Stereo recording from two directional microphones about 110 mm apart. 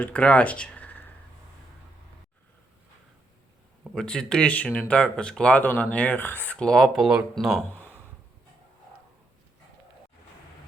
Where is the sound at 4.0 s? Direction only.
5° left (ahead or behind).